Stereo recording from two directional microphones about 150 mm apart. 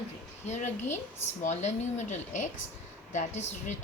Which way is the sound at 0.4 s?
50° left (ahead or behind).